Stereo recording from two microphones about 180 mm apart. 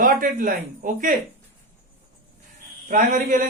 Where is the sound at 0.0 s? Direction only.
50° right (ahead or behind).